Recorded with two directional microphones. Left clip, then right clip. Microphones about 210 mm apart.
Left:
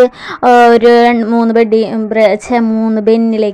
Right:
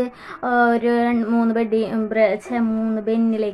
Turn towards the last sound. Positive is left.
turn(degrees=35)  # may be behind; listen again after turning